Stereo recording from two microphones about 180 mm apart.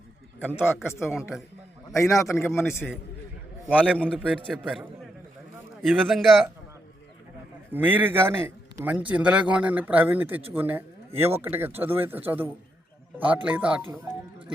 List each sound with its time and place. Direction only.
0.3 s speech: 10° left (ahead or behind)
1.9 s a man's voice: 15° left (ahead or behind)
3.7 s speech: 5° right (ahead or behind)
3.9 s a man's voice: 5° left (ahead or behind)
7.7 s a man's voice: 10° right (ahead or behind)